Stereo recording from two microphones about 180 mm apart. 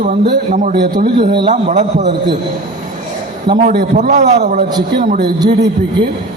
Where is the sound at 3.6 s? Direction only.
60° right (ahead or behind).